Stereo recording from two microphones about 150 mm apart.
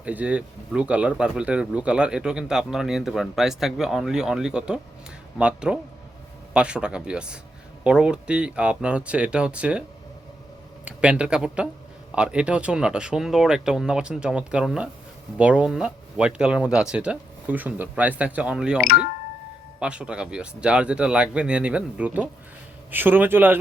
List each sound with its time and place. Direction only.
0.0 s speech: 10° right (ahead or behind)
10.8 s speech: 5° right (ahead or behind)
18.8 s speech: 85° left
19.8 s speech: 5° right (ahead or behind)